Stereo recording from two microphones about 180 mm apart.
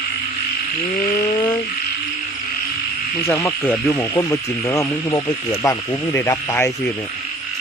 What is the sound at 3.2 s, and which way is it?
Speech, 15° left (ahead or behind).